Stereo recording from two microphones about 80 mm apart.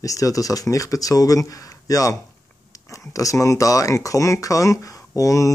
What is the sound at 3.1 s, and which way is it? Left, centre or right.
Speech, left.